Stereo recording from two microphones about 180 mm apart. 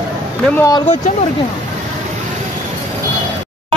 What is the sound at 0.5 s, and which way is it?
Speech, 20° left (ahead or behind).